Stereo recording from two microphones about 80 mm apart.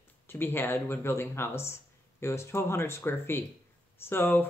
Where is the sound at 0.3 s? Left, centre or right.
Left.